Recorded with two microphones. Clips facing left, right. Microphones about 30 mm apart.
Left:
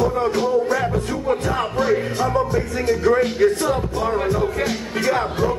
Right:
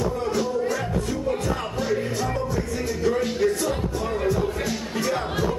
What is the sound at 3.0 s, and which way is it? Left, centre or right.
Speech, left.